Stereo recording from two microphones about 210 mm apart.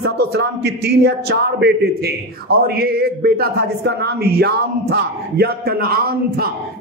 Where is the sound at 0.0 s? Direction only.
55° right (ahead or behind).